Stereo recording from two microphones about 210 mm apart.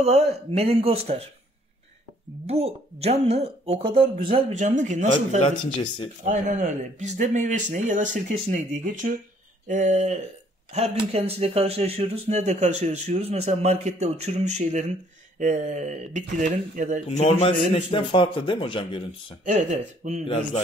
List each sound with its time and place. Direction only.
0.0 s speech: 30° right (ahead or behind)
2.4 s speech: 30° right (ahead or behind)
5.4 s a man's voice: 20° left (ahead or behind)
6.2 s speech: 35° right (ahead or behind)
17.1 s a man's voice: 25° left (ahead or behind)
19.4 s speech: 35° right (ahead or behind)